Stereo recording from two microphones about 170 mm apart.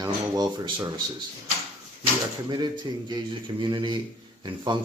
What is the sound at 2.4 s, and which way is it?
Speech, 25° right (ahead or behind).